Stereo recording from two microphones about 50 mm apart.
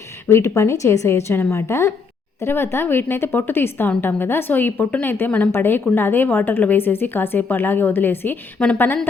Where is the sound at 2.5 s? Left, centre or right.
Left.